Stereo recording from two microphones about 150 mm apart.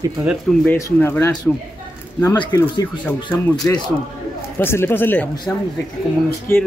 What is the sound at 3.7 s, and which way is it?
Speech, 15° left (ahead or behind).